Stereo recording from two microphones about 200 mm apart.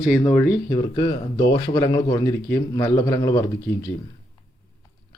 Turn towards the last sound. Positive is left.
turn(degrees=15)  # may be behind; listen again after turning